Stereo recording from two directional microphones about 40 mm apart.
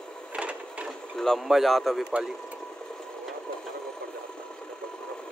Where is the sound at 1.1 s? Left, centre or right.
Centre.